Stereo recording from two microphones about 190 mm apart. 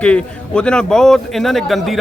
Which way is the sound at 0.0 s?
5° left (ahead or behind).